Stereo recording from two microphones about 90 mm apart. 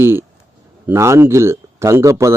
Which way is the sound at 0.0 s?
25° right (ahead or behind).